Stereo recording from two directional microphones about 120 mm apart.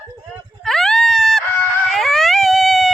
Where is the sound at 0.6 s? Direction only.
Centre (ahead or behind).